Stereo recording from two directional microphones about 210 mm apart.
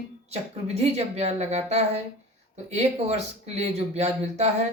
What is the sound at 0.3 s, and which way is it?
Speech, 30° right (ahead or behind).